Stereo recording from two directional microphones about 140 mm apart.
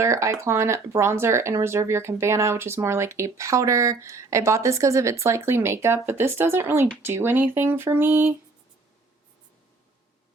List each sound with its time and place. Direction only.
0.0 s speech: 20° right (ahead or behind)